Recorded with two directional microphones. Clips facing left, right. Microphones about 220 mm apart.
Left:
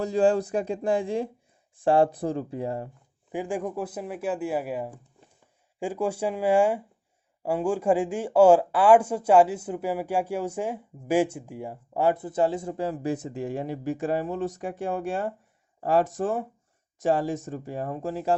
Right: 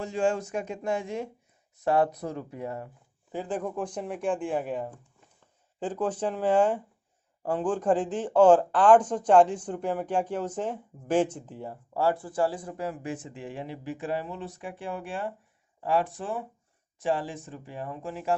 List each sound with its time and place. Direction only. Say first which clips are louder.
0.0 s speech: left 5 dB; 35° left (ahead or behind)
3.3 s speech: left 2 dB; 15° left (ahead or behind); by 18.3 s 35° left (ahead or behind)